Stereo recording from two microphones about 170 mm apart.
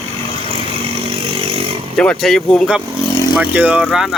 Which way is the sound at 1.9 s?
5° left (ahead or behind).